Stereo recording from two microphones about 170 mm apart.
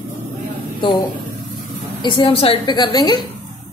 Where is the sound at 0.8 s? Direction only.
25° left (ahead or behind).